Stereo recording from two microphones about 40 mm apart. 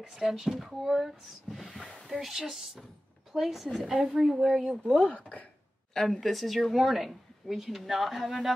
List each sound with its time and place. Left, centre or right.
0.0 s a woman's voice: centre
4.8 s speech: left
5.9 s a woman's voice: centre